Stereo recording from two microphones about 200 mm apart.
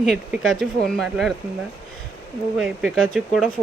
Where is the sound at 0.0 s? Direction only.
Centre (ahead or behind).